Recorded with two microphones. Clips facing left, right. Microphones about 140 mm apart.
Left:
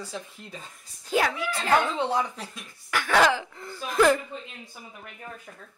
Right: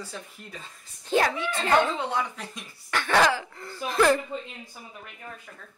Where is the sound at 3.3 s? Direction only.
15° left (ahead or behind).